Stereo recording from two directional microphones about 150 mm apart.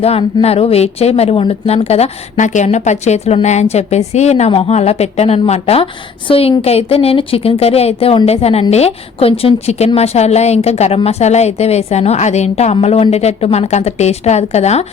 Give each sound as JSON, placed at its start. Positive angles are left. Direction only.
{"t": 0.0, "sound": "a woman's voice", "side_deg": 40}